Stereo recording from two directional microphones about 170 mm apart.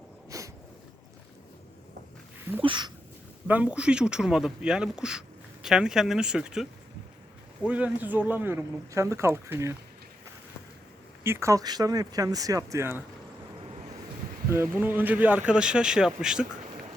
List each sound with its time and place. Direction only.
0.3 s a sound: 20° right (ahead or behind)
2.6 s speech: 30° right (ahead or behind)
3.4 s speech: 10° right (ahead or behind)
11.2 s speech: 15° right (ahead or behind)
14.5 s speech: 15° right (ahead or behind)